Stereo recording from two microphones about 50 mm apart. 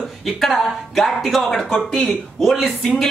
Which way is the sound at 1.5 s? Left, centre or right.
Centre.